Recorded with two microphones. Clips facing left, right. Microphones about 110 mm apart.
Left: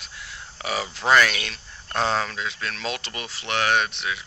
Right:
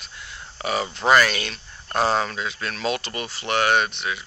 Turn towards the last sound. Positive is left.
turn(degrees=0)  # may be behind; listen again after turning